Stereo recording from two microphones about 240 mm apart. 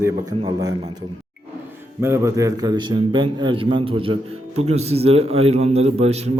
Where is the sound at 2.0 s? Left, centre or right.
Centre.